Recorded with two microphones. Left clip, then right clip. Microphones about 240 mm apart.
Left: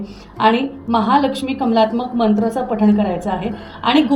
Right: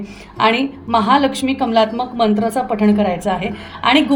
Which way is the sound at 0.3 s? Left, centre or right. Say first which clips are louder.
Even; right.